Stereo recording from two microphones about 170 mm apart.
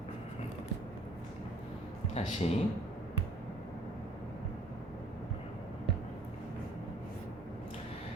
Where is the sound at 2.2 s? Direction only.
40° left (ahead or behind).